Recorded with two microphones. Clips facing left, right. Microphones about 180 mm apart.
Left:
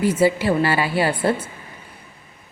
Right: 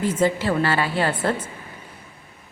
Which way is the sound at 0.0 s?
10° left (ahead or behind).